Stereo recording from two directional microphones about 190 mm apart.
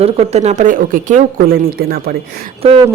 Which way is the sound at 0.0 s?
35° right (ahead or behind).